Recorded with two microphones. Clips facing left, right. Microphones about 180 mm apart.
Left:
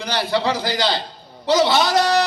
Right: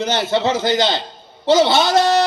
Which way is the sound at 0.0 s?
25° right (ahead or behind).